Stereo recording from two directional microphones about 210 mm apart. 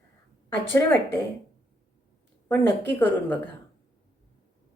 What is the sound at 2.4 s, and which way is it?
Speech, 10° left (ahead or behind).